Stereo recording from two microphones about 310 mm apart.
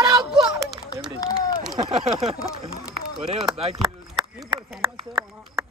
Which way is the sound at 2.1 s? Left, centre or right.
Centre.